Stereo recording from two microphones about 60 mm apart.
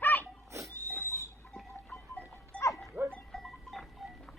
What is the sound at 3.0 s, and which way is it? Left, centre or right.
Dog, right.